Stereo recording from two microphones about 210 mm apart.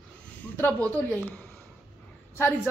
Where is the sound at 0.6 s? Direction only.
5° left (ahead or behind).